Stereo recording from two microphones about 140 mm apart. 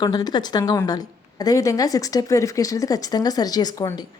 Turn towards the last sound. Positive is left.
turn(degrees=30)  # may be behind; listen again after turning